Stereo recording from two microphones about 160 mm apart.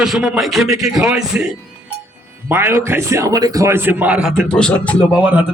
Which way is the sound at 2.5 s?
15° right (ahead or behind).